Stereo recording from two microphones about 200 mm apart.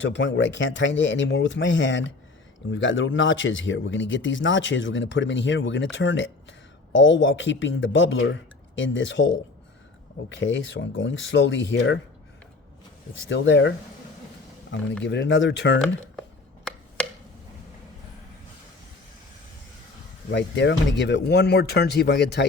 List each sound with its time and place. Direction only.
0.0 s speech: 65° left (ahead or behind)
13.2 s speech: 65° left (ahead or behind)
15.0 s speech: 65° left (ahead or behind)
17.0 s tick-tock: 5° left (ahead or behind)
20.3 s speech: 60° left (ahead or behind)